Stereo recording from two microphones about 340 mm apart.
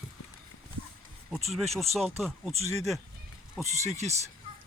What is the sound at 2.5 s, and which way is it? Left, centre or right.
Speech, centre.